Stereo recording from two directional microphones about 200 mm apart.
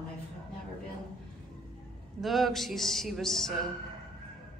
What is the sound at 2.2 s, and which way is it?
A woman's voice, centre (ahead or behind).